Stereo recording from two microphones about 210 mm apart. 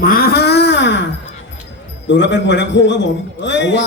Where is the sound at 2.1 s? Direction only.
55° left (ahead or behind).